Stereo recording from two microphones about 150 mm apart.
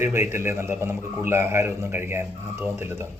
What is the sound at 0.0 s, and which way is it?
A man's voice, 15° right (ahead or behind).